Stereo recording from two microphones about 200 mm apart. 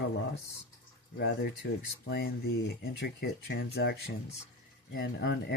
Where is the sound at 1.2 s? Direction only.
60° left (ahead or behind).